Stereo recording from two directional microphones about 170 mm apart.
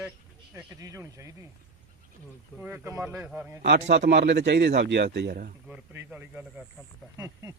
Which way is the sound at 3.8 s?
90° right.